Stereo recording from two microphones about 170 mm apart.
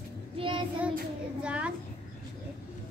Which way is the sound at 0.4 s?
30° right (ahead or behind).